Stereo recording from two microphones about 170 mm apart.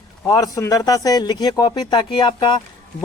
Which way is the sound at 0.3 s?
20° left (ahead or behind).